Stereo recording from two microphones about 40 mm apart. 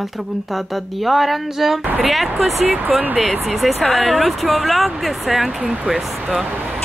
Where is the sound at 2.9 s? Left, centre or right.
Centre.